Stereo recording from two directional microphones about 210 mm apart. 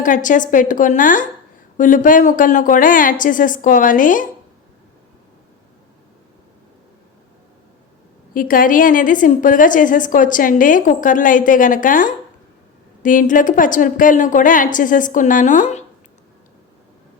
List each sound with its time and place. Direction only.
0.0 s a woman's voice: 40° left (ahead or behind)
8.3 s a woman's voice: 40° left (ahead or behind)